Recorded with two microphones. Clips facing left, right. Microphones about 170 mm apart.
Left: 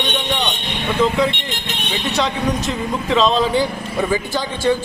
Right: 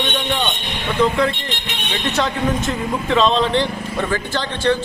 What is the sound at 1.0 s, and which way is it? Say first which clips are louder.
A man's voice: even; centre (ahead or behind).